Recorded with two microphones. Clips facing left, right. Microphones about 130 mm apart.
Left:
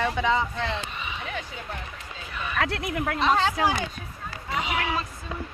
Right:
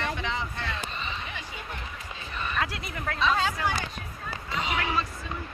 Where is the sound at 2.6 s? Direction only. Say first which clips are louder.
Left 9 dB; 65° left (ahead or behind); by 3.7 s 80° left.